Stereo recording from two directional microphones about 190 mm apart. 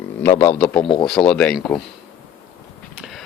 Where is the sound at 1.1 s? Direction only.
5° left (ahead or behind).